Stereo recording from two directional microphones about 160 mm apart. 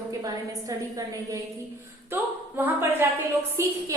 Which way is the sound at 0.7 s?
20° right (ahead or behind).